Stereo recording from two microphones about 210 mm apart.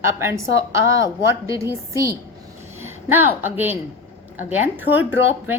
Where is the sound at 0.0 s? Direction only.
15° right (ahead or behind).